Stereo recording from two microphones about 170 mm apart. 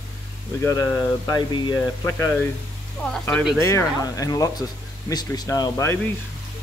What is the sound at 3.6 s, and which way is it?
Speech, 15° left (ahead or behind).